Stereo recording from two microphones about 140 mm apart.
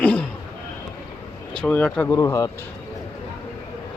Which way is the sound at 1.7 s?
10° left (ahead or behind).